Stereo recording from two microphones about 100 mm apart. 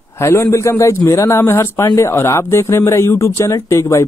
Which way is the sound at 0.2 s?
30° left (ahead or behind).